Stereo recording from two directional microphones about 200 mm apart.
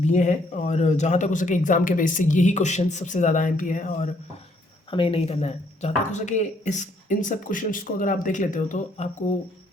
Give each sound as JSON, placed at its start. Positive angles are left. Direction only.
{"t": 0.0, "sound": "speech", "side_deg": 35}
{"t": 4.9, "sound": "speech", "side_deg": 25}